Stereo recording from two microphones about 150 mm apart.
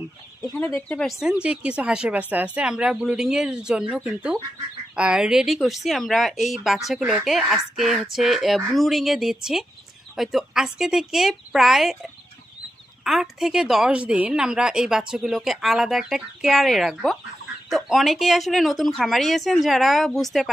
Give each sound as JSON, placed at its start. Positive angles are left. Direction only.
{"t": 0.7, "sound": "a woman's voice", "side_deg": 5}
{"t": 1.2, "sound": "a woman's voice", "side_deg": -5}